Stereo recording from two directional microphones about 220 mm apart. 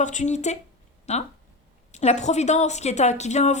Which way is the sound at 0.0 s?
35° left (ahead or behind).